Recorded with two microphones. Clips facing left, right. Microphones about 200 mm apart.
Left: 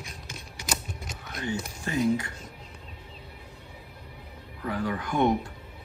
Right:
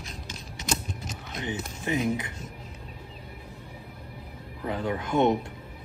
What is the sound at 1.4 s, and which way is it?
Speech, 20° right (ahead or behind).